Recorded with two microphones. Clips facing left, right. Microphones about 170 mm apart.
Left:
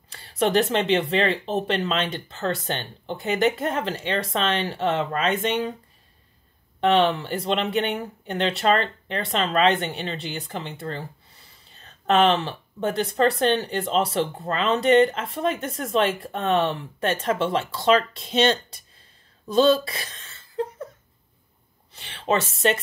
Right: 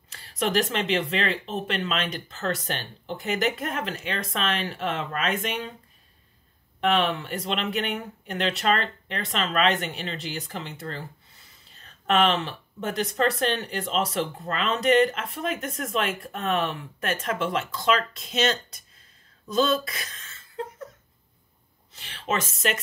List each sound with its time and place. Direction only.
0.1 s speech: 30° left (ahead or behind)
6.8 s speech: 30° left (ahead or behind)
12.1 s speech: 30° left (ahead or behind)
21.9 s speech: 30° left (ahead or behind)